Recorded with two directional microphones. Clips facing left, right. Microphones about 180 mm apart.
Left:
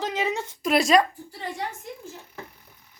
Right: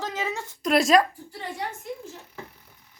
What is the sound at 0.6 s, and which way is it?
Speech, centre (ahead or behind).